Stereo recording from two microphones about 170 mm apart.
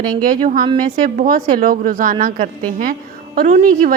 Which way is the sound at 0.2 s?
55° right (ahead or behind).